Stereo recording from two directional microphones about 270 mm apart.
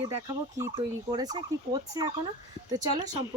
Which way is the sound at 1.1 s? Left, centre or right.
Centre.